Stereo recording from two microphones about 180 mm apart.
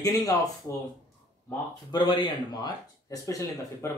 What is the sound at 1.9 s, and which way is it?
Speech, 25° left (ahead or behind).